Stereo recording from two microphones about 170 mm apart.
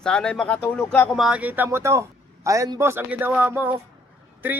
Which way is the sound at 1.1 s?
5° right (ahead or behind).